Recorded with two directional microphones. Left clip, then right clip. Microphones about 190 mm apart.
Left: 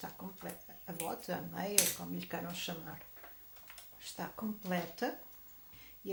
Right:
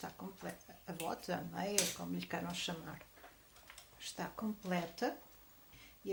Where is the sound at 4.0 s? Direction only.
20° right (ahead or behind).